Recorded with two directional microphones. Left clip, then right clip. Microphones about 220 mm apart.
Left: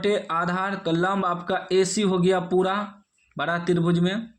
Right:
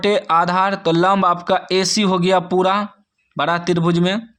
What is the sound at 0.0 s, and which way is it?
Speech, 35° right (ahead or behind).